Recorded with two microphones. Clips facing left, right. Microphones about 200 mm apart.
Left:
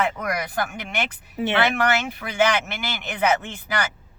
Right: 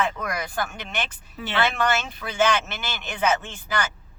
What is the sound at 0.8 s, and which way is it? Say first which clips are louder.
Speech: left 3 dB; 15° left (ahead or behind).